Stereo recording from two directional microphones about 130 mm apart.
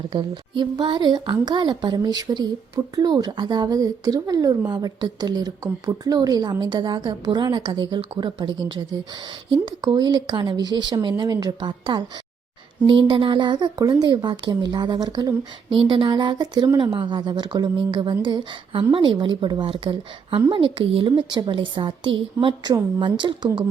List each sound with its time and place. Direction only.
0.1 s a woman's voice: 35° right (ahead or behind)